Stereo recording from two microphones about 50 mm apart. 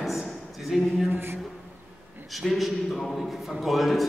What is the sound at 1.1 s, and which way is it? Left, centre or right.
Speech, right.